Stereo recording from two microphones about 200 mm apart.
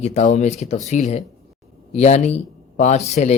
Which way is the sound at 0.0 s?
35° left (ahead or behind).